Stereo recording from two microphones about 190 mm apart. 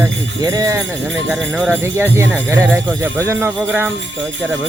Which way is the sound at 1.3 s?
5° right (ahead or behind).